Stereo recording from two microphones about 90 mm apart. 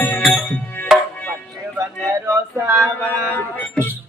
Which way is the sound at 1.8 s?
30° right (ahead or behind).